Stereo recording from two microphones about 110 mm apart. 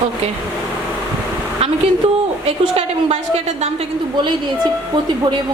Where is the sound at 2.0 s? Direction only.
70° right (ahead or behind).